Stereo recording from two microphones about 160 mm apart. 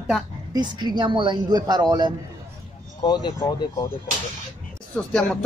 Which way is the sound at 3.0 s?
30° left (ahead or behind).